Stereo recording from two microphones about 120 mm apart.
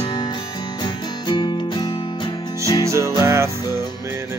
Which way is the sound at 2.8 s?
25° right (ahead or behind).